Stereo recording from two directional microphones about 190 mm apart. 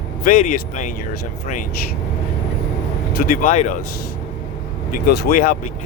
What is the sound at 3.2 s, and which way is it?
Speech, 40° left (ahead or behind).